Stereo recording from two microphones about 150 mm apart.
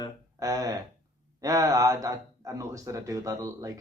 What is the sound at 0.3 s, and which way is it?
Speech, 25° right (ahead or behind).